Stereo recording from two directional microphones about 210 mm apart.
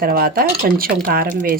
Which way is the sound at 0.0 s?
45° right (ahead or behind).